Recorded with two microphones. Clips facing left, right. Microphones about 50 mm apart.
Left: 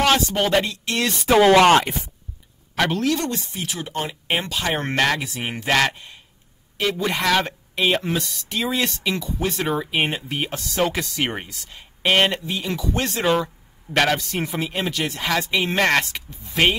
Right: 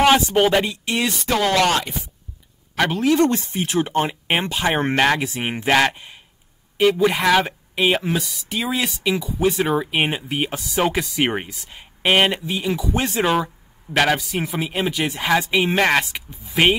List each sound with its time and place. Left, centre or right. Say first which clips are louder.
0.0 s speech: right 4 dB; centre
1.3 s speech: left 6 dB; centre
1.7 s speech: left 6 dB; left
2.8 s speech: right 1 dB; centre
3.3 s speech: right 6 dB; right
4.3 s speech: left 1 dB; right